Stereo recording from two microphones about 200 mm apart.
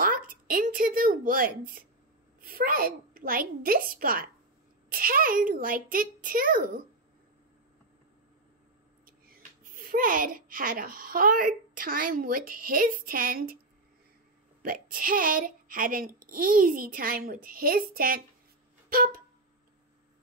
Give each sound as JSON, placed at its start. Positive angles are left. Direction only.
{"t": 0.0, "sound": "a woman's voice", "side_deg": -45}
{"t": 9.0, "sound": "speech", "side_deg": -45}
{"t": 14.6, "sound": "a child's voice", "side_deg": -45}